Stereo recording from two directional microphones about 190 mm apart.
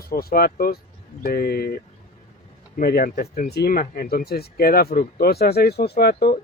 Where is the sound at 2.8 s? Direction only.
50° left (ahead or behind).